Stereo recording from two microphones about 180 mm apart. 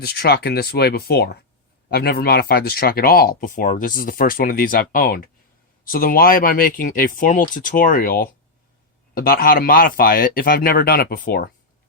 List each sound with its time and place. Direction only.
0.0 s speech: 60° left (ahead or behind)